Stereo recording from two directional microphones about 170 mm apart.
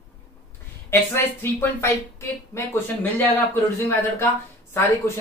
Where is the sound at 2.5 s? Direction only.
15° left (ahead or behind).